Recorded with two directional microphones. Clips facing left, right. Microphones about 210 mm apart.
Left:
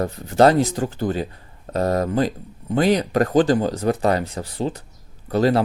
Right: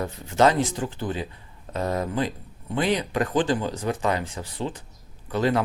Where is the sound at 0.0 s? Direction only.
40° left (ahead or behind).